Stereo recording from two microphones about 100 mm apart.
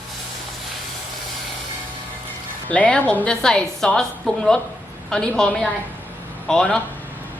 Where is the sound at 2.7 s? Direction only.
15° left (ahead or behind).